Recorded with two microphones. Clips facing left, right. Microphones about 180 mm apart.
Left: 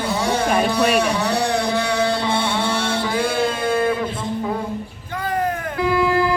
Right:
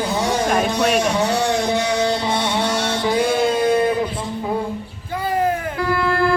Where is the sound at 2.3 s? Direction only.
30° left (ahead or behind).